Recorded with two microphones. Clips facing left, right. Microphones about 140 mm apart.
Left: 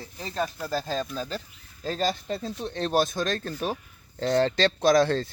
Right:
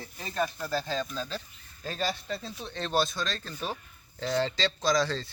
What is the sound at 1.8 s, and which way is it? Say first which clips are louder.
Speech: left 5 dB; 45° left (ahead or behind).